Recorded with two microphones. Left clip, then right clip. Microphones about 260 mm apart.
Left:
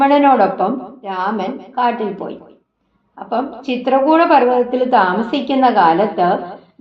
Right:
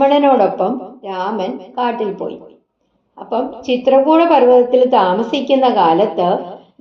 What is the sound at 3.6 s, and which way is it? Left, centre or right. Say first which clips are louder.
A woman's voice: right 3 dB; left.